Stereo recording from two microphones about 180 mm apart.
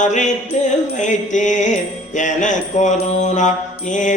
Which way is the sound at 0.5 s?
40° left (ahead or behind).